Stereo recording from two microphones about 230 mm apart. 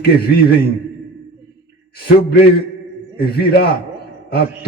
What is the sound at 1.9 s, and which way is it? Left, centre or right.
Mantra, left.